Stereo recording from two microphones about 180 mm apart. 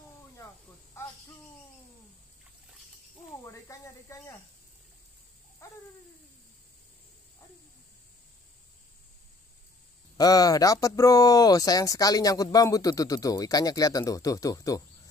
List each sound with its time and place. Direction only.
1.0 s cricket: 15° left (ahead or behind)
3.4 s speech: 15° left (ahead or behind)
5.6 s a sound: 15° left (ahead or behind)
10.1 s speech: 20° left (ahead or behind)